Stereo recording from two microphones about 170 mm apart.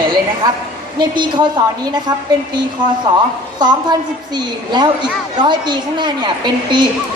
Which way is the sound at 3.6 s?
25° right (ahead or behind).